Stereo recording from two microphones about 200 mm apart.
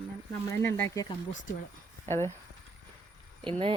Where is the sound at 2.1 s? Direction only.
10° left (ahead or behind).